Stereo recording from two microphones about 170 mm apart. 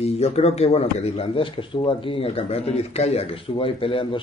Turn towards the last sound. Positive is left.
turn(degrees=30)  # may be behind; listen again after turning